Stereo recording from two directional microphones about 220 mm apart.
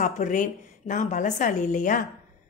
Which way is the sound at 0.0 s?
35° left (ahead or behind).